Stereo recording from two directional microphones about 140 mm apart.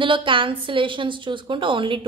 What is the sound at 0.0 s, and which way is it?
A woman's voice, 35° right (ahead or behind).